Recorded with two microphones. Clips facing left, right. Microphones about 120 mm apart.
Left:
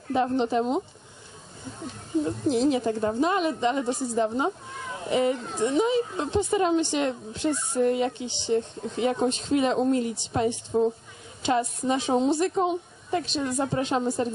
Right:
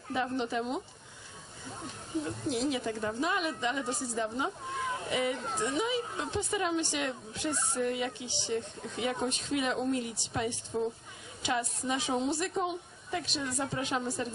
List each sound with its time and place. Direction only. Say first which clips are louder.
0.1 s a woman's voice: left 8 dB; 30° left (ahead or behind)
2.2 s a woman's voice: left 9 dB; 30° left (ahead or behind)